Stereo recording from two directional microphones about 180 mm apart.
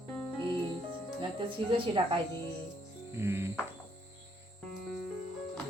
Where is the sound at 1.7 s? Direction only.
30° right (ahead or behind).